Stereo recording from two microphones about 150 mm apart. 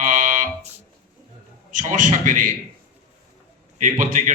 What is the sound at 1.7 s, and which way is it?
Speech, 60° right (ahead or behind).